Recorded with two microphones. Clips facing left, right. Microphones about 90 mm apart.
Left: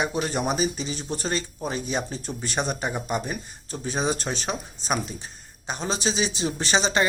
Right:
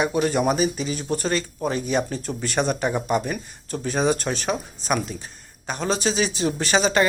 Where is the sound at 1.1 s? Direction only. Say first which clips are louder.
Right 4 dB; 20° left (ahead or behind).